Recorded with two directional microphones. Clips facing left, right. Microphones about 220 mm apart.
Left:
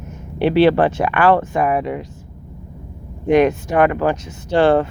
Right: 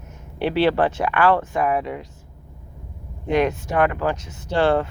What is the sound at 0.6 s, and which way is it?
Speech, 65° left (ahead or behind).